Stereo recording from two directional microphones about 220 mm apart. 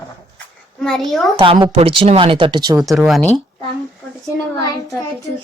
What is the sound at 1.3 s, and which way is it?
Speech, 25° right (ahead or behind).